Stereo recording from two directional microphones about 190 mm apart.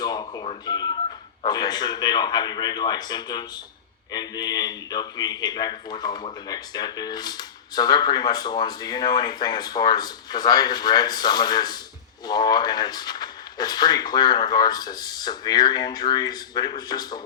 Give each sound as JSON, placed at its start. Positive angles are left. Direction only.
{"t": 0.0, "sound": "a man's voice", "side_deg": 20}